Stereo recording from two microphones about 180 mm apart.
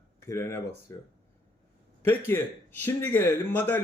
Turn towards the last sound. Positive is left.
turn(degrees=10)  # may be behind; listen again after turning